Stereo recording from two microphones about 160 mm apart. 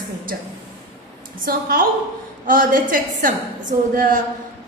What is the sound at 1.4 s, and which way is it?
A woman's voice, 65° right (ahead or behind).